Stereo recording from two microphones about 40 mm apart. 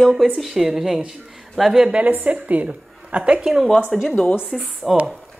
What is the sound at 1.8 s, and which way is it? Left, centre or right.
A woman's voice, right.